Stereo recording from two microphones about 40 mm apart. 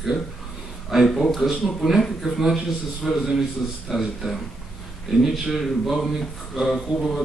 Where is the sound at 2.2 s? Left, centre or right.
Centre.